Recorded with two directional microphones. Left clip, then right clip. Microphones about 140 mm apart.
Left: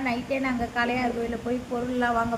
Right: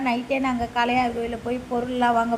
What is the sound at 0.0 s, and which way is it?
A woman's voice, 30° right (ahead or behind).